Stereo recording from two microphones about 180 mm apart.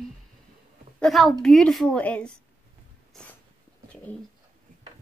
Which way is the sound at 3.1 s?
Centre (ahead or behind).